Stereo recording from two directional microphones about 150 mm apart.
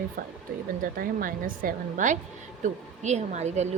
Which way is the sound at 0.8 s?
65° right (ahead or behind).